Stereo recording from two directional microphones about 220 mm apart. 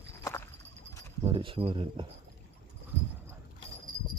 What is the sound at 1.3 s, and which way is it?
Speech, 25° right (ahead or behind).